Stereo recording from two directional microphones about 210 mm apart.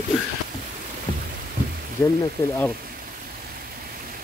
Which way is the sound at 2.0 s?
5° left (ahead or behind).